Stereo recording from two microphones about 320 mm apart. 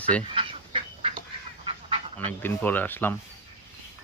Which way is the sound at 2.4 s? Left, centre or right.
Centre.